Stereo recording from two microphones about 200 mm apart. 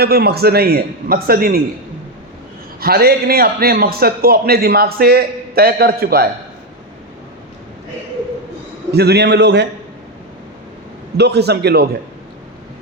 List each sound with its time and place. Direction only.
0.0 s a man's voice: 50° right (ahead or behind)
2.8 s a man's voice: 50° right (ahead or behind)
8.9 s a man's voice: 55° right (ahead or behind)
11.2 s a man's voice: 55° right (ahead or behind)